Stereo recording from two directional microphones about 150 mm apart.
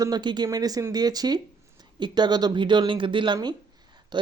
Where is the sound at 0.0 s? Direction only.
30° right (ahead or behind).